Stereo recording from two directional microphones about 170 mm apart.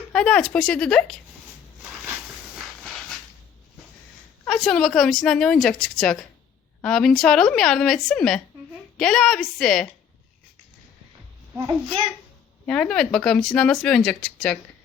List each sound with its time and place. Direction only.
0.1 s speech: 5° left (ahead or behind)
2.6 s hiss: centre (ahead or behind)
4.4 s speech: centre (ahead or behind)
11.5 s a child's voice: 25° right (ahead or behind)
12.6 s speech: 5° left (ahead or behind)